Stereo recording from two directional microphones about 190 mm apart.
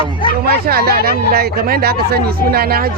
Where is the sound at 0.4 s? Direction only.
55° right (ahead or behind).